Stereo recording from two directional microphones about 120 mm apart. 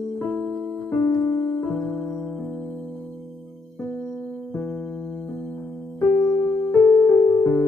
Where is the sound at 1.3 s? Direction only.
10° left (ahead or behind).